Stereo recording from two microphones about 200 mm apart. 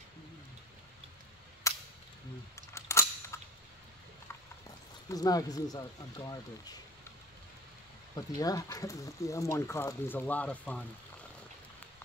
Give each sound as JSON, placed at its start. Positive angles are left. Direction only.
{"t": 1.6, "sound": "cap gun", "side_deg": 15}
{"t": 2.5, "sound": "a sound", "side_deg": 15}
{"t": 5.1, "sound": "speech", "side_deg": 20}
{"t": 8.2, "sound": "speech", "side_deg": 20}